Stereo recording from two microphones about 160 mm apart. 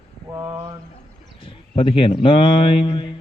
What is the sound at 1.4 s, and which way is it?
A man's voice, 35° left (ahead or behind).